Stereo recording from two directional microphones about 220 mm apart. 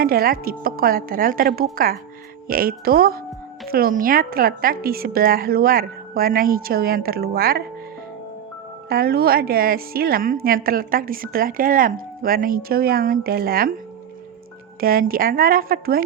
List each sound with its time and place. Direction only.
0.0 s a woman's voice: 40° right (ahead or behind)
8.9 s a woman's voice: 45° right (ahead or behind)
14.8 s a woman's voice: 40° right (ahead or behind)